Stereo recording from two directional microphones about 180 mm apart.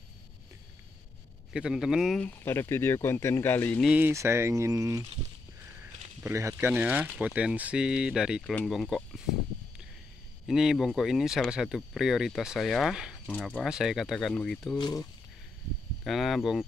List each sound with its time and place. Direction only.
1.5 s speech: 5° right (ahead or behind)
3.8 s speech: 10° right (ahead or behind)
6.2 s speech: 15° right (ahead or behind)
10.4 s speech: 5° right (ahead or behind)
14.8 s speech: 20° left (ahead or behind)
16.0 s speech: centre (ahead or behind)